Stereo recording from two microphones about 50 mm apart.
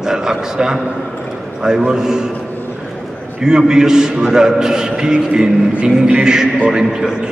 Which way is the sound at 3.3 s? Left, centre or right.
Centre.